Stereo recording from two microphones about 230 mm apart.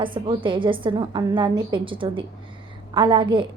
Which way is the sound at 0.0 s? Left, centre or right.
Right.